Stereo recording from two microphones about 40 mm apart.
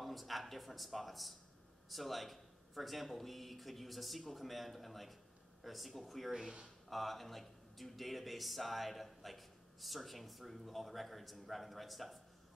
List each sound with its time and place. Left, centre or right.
0.0 s speech: centre